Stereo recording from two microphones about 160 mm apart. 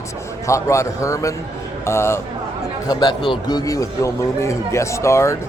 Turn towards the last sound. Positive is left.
turn(degrees=20)  # may be behind; listen again after turning